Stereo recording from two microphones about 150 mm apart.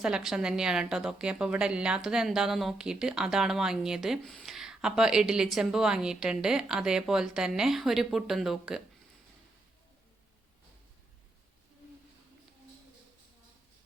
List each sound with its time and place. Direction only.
0.0 s a woman's voice: 5° right (ahead or behind)